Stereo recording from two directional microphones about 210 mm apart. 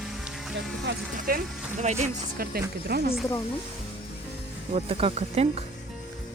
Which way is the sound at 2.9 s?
50° right (ahead or behind).